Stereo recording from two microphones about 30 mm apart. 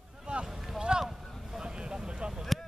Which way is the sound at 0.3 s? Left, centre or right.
Right.